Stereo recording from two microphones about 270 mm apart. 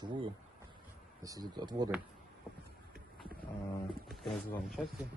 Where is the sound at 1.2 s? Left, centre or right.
Centre.